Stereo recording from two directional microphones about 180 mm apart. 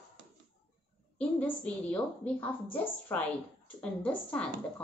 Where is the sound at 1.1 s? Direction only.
10° left (ahead or behind).